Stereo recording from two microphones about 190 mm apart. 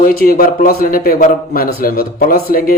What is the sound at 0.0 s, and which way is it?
A man's voice, 50° left (ahead or behind).